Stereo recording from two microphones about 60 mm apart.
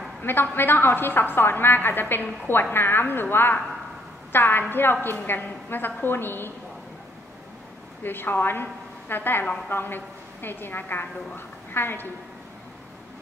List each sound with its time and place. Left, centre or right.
0.2 s a woman's voice: left
8.0 s a woman's voice: left